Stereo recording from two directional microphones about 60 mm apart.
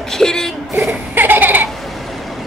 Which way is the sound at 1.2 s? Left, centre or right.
Right.